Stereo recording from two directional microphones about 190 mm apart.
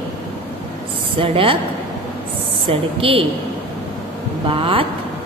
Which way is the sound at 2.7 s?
30° right (ahead or behind).